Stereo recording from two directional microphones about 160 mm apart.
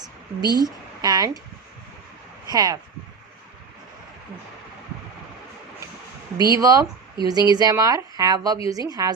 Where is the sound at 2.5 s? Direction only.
25° right (ahead or behind).